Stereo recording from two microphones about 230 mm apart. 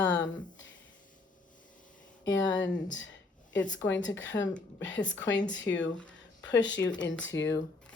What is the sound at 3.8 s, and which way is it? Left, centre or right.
Speech, left.